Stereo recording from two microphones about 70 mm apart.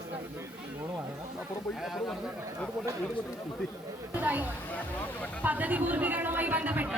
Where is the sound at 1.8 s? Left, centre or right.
Centre.